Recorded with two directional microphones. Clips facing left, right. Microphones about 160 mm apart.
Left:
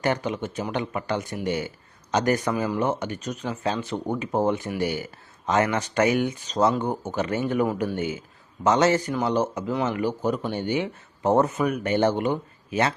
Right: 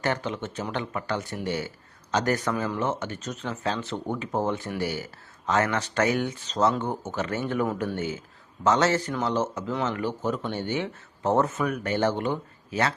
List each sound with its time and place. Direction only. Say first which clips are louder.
0.0 s a man's voice: left 3 dB; 15° left (ahead or behind)